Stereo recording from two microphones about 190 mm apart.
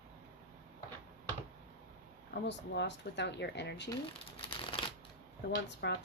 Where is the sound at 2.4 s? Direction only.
65° left (ahead or behind).